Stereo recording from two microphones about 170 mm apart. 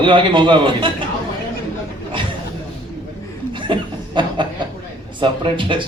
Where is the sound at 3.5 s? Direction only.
30° right (ahead or behind).